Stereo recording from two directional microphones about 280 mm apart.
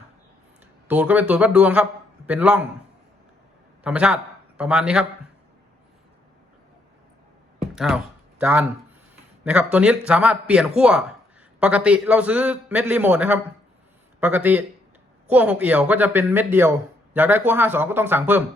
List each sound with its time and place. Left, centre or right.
0.9 s a man's voice: centre
3.8 s a man's voice: centre
8.4 s a man's voice: centre